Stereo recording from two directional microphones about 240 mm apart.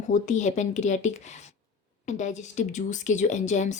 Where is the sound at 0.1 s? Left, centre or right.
Left.